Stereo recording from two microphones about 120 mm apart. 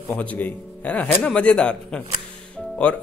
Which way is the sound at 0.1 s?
10° left (ahead or behind).